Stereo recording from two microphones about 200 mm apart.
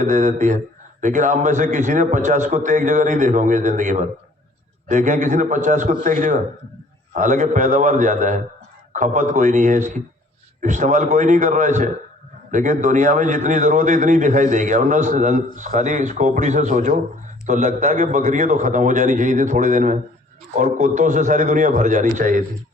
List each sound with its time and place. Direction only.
0.0 s a man's voice: 40° right (ahead or behind)